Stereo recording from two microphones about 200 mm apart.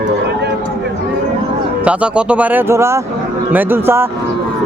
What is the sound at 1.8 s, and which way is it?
Speech, 5° right (ahead or behind).